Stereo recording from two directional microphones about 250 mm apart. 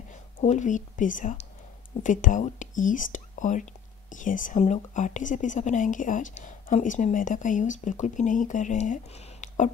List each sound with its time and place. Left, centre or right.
0.1 s speech: left